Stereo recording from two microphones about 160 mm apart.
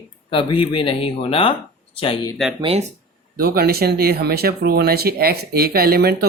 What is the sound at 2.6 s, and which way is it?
Speech, 40° right (ahead or behind).